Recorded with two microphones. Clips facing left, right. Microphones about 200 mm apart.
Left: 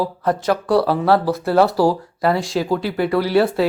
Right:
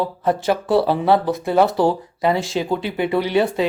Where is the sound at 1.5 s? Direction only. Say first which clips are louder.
Left 1 dB; centre (ahead or behind).